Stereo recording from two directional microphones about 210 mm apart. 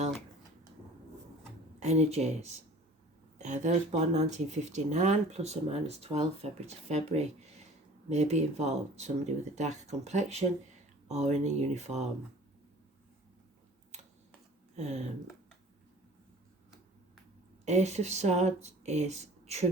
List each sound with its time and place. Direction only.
1.8 s speech: 30° right (ahead or behind)
3.3 s speech: 35° right (ahead or behind)
13.9 s a sound: 35° right (ahead or behind)
14.8 s speech: 35° right (ahead or behind)
17.7 s speech: 30° right (ahead or behind)